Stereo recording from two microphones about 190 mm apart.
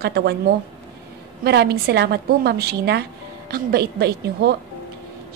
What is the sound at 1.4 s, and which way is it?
A woman's voice, 60° right (ahead or behind).